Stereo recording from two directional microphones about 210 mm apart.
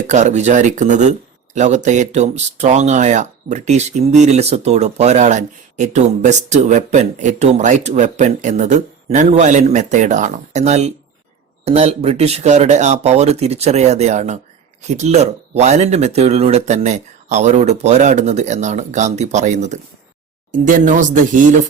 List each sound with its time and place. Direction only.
0.1 s speech: 35° right (ahead or behind)